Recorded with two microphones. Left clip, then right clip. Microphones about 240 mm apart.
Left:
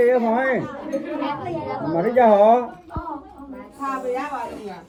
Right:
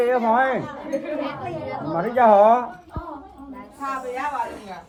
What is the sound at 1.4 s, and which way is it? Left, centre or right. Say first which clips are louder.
Speech: left 2 dB; centre.